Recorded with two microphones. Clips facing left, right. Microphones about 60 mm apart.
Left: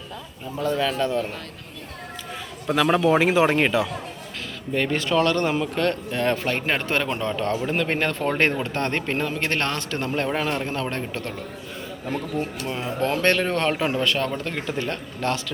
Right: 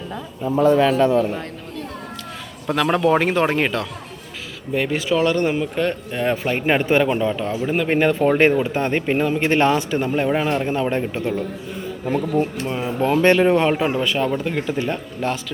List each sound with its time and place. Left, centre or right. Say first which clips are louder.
0.6 s speech: right 8 dB; centre
2.6 s a man's voice: right 2 dB; centre
4.7 s speech: right 2 dB; centre